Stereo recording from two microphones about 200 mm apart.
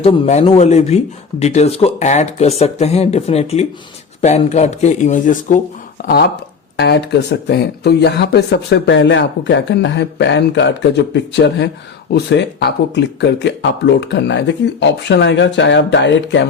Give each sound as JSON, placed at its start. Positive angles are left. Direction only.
{"t": 0.0, "sound": "speech", "side_deg": 30}
{"t": 6.1, "sound": "speech", "side_deg": 55}